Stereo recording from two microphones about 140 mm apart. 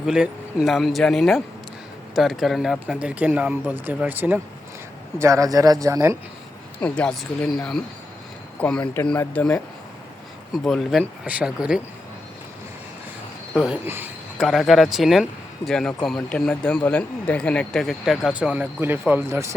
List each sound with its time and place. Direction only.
0.0 s speech: 5° right (ahead or behind)
5.2 s speech: 25° right (ahead or behind)
6.8 s speech: 5° left (ahead or behind)
13.6 s speech: 10° right (ahead or behind)
14.3 s speech: centre (ahead or behind); by 19.5 s 20° right (ahead or behind)